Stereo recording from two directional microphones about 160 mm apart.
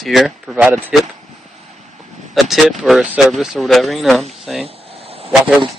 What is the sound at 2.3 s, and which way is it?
Speech, centre (ahead or behind).